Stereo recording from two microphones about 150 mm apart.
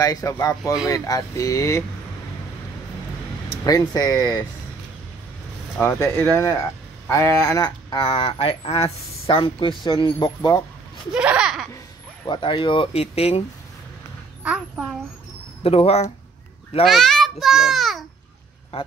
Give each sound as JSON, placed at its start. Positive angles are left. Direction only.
{"t": 0.0, "sound": "speech", "side_deg": 25}
{"t": 3.6, "sound": "speech", "side_deg": 25}
{"t": 5.8, "sound": "speech", "side_deg": 15}
{"t": 11.1, "sound": "a sound", "side_deg": -5}
{"t": 12.3, "sound": "speech", "side_deg": 35}
{"t": 14.4, "sound": "a woman's voice", "side_deg": -5}
{"t": 15.6, "sound": "speech", "side_deg": 45}
{"t": 16.8, "sound": "a child's voice", "side_deg": 0}
{"t": 18.7, "sound": "speech", "side_deg": 40}